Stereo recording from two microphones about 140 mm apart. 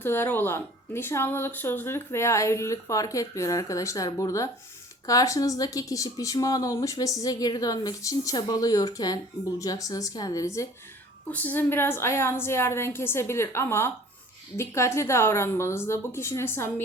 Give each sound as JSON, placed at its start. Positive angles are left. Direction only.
{"t": 0.0, "sound": "speech", "side_deg": 15}
{"t": 11.3, "sound": "a woman's voice", "side_deg": 10}